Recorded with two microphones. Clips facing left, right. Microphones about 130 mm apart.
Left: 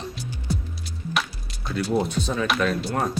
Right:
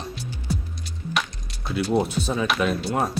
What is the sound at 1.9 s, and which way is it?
Speech, 10° right (ahead or behind).